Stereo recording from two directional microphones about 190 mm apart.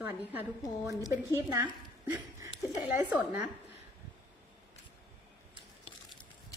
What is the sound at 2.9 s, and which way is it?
Speech, 10° right (ahead or behind).